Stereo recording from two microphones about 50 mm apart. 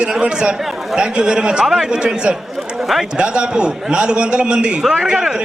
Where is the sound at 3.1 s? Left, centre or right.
Centre.